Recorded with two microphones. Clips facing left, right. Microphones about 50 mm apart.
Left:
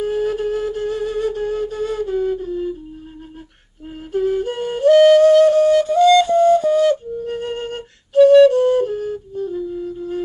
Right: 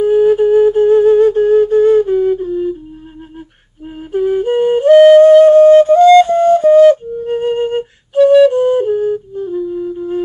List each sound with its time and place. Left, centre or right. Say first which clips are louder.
0.0 s flute: right 10 dB; centre
2.3 s flute: right 6 dB; centre
3.8 s flute: right 4 dB; centre
9.6 s music: right 6 dB; centre